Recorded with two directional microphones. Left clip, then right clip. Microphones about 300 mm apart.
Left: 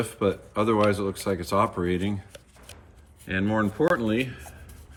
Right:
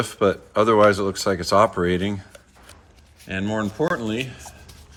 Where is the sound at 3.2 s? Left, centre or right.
Centre.